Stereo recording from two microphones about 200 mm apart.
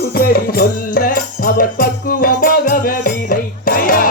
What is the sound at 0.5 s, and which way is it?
Music, 45° left (ahead or behind).